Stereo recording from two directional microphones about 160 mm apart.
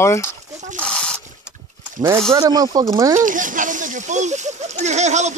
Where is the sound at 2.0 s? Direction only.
30° right (ahead or behind).